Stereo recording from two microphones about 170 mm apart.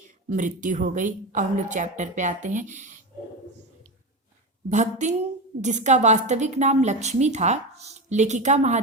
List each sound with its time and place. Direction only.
0.3 s a woman's voice: 50° right (ahead or behind)
4.7 s a woman's voice: 45° right (ahead or behind)